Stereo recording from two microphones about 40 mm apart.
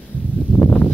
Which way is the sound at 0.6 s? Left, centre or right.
Left.